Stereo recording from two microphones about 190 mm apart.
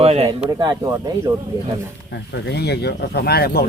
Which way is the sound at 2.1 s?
65° left (ahead or behind).